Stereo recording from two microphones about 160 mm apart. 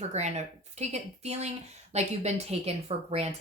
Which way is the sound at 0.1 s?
45° right (ahead or behind).